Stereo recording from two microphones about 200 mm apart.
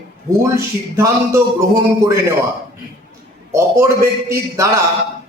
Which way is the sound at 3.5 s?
15° right (ahead or behind).